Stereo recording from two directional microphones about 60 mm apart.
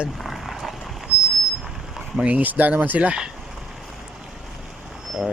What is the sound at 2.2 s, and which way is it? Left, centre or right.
Speech, right.